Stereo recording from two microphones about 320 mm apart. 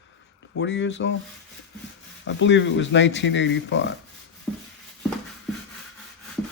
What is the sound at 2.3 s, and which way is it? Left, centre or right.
Speech, left.